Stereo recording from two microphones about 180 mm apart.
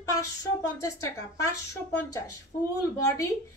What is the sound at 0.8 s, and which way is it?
Speech, 15° left (ahead or behind).